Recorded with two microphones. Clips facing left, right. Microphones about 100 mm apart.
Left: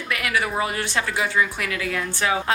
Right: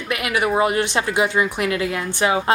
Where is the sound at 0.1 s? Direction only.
20° right (ahead or behind).